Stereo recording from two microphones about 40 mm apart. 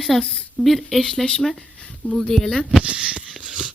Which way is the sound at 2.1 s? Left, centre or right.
Centre.